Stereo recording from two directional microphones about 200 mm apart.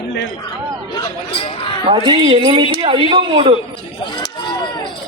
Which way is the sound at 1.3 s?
25° left (ahead or behind).